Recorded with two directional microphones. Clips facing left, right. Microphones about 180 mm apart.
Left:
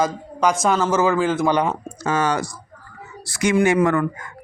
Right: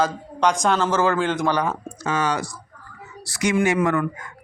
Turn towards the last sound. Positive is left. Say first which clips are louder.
# left 3 dB
turn(degrees=50)  # may be behind; listen again after turning